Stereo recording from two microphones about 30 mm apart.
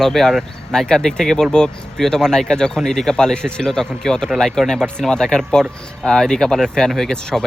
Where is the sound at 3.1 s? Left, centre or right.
Left.